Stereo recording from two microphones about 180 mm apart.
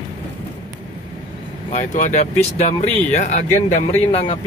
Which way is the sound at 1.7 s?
40° left (ahead or behind).